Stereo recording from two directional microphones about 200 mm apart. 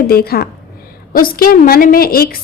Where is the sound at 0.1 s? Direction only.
50° left (ahead or behind).